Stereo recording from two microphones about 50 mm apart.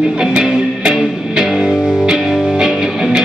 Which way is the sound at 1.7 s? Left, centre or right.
Centre.